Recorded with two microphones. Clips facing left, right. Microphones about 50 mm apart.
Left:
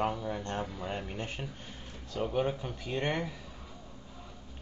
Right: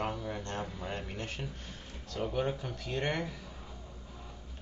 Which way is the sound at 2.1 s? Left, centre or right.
Centre.